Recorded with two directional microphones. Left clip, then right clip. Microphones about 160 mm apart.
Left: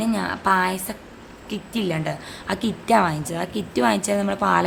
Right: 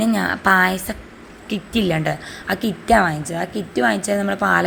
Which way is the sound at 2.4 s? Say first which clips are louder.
Right 3 dB; centre (ahead or behind).